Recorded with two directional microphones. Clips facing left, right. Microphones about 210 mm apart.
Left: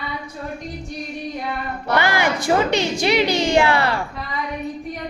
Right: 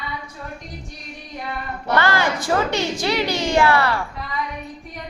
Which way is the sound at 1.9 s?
15° left (ahead or behind).